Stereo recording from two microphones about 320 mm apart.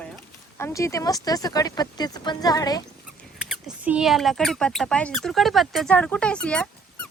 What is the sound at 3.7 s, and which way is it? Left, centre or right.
Speech, centre.